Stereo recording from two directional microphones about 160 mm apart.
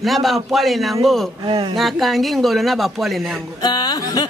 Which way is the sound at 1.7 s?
Centre (ahead or behind).